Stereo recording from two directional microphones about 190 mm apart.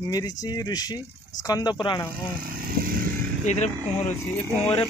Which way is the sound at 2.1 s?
50° right (ahead or behind).